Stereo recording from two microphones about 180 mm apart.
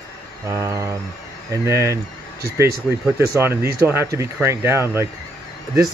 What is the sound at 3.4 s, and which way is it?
Speech, 10° right (ahead or behind).